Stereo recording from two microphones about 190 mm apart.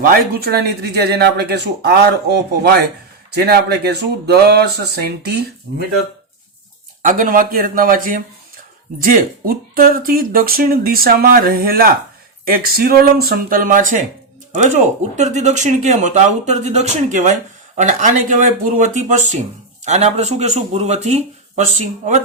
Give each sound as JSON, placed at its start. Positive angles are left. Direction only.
{"t": 0.0, "sound": "speech", "side_deg": -50}
{"t": 7.0, "sound": "speech", "side_deg": -45}
{"t": 15.1, "sound": "speech", "side_deg": -40}